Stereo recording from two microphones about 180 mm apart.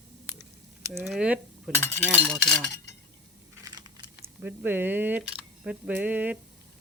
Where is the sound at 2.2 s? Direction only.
5° left (ahead or behind).